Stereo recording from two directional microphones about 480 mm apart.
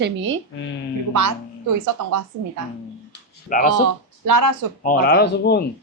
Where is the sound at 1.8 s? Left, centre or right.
Right.